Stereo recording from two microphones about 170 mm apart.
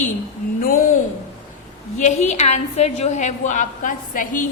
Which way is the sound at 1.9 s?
45° left (ahead or behind).